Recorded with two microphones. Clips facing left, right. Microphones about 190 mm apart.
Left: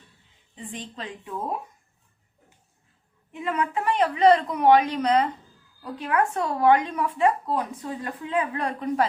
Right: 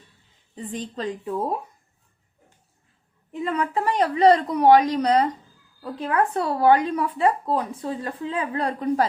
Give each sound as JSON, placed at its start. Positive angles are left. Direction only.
{"t": 0.5, "sound": "a woman's voice", "side_deg": -40}
{"t": 3.3, "sound": "a woman's voice", "side_deg": -35}